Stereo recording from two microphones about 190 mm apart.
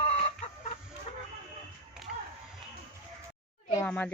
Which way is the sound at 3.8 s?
5° left (ahead or behind).